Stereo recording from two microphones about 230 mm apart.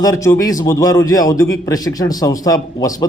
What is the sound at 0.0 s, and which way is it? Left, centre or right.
A man's voice, centre.